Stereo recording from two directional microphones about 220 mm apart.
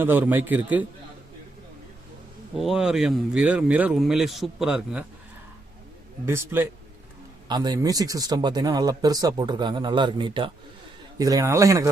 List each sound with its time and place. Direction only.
0.0 s a man's voice: 10° right (ahead or behind)
2.6 s speech: centre (ahead or behind)
6.2 s a man's voice: 10° right (ahead or behind)